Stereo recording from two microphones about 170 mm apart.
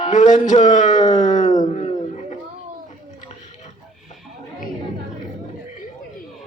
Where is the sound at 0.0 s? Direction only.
45° left (ahead or behind).